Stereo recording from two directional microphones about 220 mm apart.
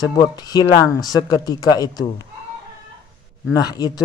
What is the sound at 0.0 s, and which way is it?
Speech, 15° left (ahead or behind).